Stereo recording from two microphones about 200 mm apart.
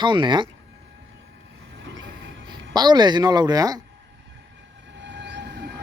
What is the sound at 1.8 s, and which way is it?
Train, 65° right (ahead or behind).